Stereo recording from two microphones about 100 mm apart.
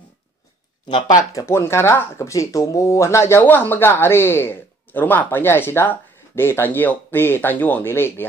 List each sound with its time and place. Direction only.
0.8 s speech: 50° left (ahead or behind)
1.1 s speech: 30° left (ahead or behind)